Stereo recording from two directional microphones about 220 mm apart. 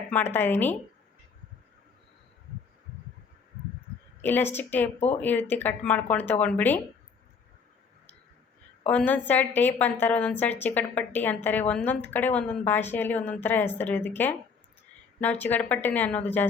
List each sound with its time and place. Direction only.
0.1 s a woman's voice: 10° left (ahead or behind)
4.2 s a woman's voice: 10° left (ahead or behind)
4.9 s speech: 30° left (ahead or behind)
5.2 s a woman's voice: 10° left (ahead or behind)
8.9 s a woman's voice: 5° left (ahead or behind)